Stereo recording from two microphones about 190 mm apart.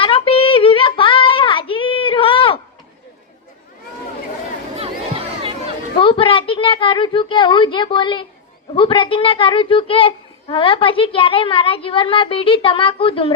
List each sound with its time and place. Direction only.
0.0 s child singing: 30° left (ahead or behind)
4.8 s a sound: 30° right (ahead or behind)
6.0 s a woman's voice: 30° left (ahead or behind)